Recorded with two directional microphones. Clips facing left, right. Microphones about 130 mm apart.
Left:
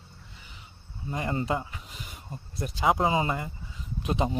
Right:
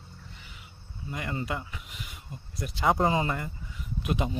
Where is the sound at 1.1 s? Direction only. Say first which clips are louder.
Left 4 dB; 30° left (ahead or behind).